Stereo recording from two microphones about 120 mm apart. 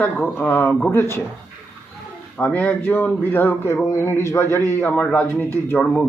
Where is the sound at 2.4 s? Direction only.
10° left (ahead or behind).